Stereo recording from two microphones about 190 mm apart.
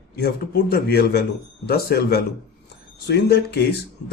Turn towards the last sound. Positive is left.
turn(degrees=60)  # may be behind; listen again after turning